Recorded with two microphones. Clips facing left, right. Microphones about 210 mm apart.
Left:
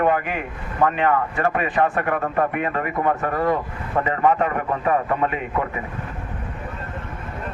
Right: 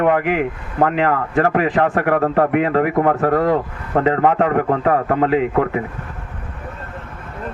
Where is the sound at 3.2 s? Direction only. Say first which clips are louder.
Right 6 dB; 75° right (ahead or behind).